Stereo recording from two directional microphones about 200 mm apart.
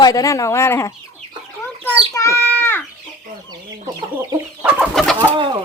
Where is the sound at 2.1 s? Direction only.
15° left (ahead or behind).